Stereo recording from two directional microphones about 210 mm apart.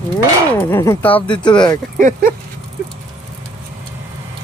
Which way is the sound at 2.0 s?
40° right (ahead or behind).